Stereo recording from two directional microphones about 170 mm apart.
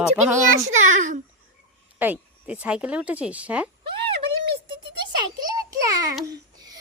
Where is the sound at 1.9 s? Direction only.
10° right (ahead or behind).